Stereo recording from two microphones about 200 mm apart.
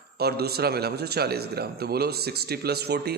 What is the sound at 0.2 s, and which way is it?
A man's voice, 50° right (ahead or behind).